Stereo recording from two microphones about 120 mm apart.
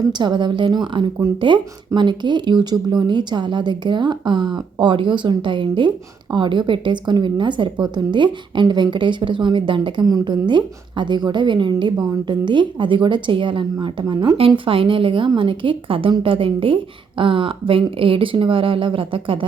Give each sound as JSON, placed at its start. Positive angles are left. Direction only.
{"t": 0.1, "sound": "a woman's voice", "side_deg": -40}